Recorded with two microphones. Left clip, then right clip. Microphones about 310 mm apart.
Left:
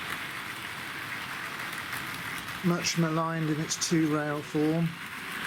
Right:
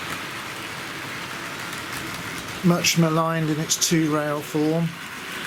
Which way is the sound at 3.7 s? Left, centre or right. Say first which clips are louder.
Right 11 dB; centre.